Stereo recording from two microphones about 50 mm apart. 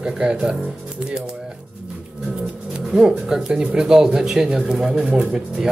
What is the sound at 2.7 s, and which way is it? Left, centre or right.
Speech, centre.